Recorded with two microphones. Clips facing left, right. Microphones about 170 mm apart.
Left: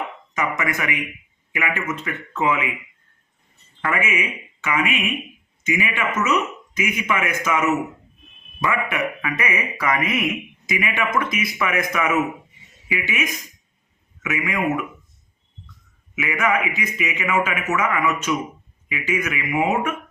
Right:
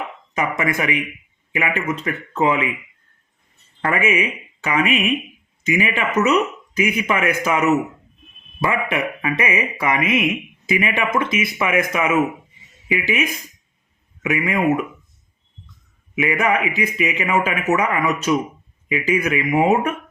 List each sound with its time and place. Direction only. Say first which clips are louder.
0.3 s speech: right 3 dB; 30° right (ahead or behind)
3.8 s a man's voice: right 4 dB; 35° right (ahead or behind)
16.1 s speech: right 3 dB; 35° right (ahead or behind)